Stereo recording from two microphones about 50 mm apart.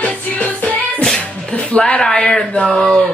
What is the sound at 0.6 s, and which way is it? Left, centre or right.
Music, left.